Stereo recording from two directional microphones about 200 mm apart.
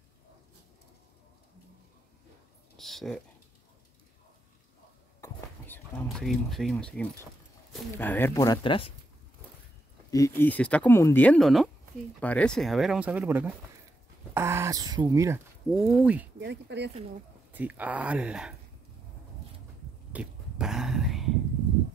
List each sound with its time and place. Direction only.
2.8 s speech: centre (ahead or behind)
5.2 s a sound: 10° left (ahead or behind)
7.7 s speech: 10° left (ahead or behind); by 8.9 s 25° left (ahead or behind)
10.1 s speech: 15° left (ahead or behind); by 15.4 s 15° right (ahead or behind)
15.7 s speech: 5° right (ahead or behind)
16.3 s speech: 60° right (ahead or behind)
17.5 s speech: 10° right (ahead or behind)
20.1 s a sound: 5° right (ahead or behind)